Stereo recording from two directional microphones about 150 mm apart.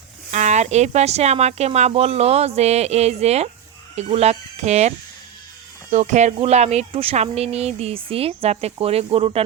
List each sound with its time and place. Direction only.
0.3 s speech: 50° right (ahead or behind)